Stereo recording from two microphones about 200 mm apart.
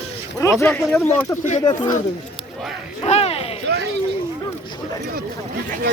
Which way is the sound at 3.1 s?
30° left (ahead or behind).